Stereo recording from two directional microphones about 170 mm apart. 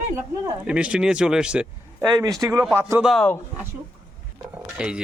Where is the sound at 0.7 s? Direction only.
5° right (ahead or behind).